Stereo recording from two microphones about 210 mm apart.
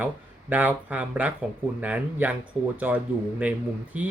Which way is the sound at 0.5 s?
10° right (ahead or behind).